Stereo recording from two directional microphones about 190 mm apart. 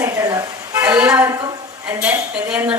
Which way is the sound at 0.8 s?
5° right (ahead or behind).